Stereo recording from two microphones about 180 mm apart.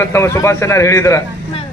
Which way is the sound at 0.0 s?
15° left (ahead or behind).